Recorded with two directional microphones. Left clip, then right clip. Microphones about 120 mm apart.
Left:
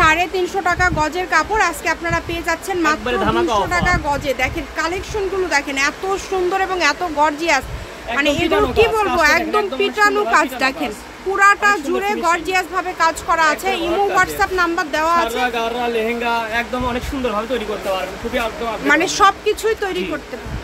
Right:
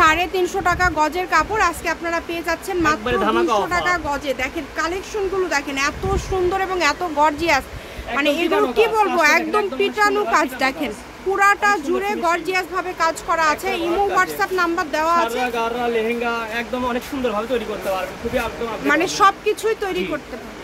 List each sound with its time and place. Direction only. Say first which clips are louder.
0.0 s speech: left 1 dB; 10° right (ahead or behind)
3.1 s speech: left 1 dB; 25° right (ahead or behind)
3.7 s speech: left 2 dB; centre (ahead or behind)
9.4 s speech: left 2 dB; 10° left (ahead or behind)
9.8 s speech: left 3 dB; 10° right (ahead or behind)
17.9 s speech: left 1 dB; 5° right (ahead or behind)